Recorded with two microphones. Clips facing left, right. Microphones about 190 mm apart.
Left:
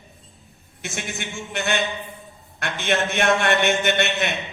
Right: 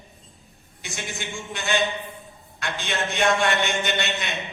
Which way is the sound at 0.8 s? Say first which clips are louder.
Left 3 dB; 60° left (ahead or behind).